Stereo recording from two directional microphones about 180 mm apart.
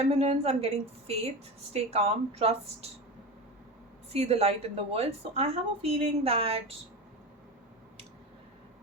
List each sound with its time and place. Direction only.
0.1 s a woman's voice: 35° right (ahead or behind)
4.1 s a woman's voice: 35° right (ahead or behind)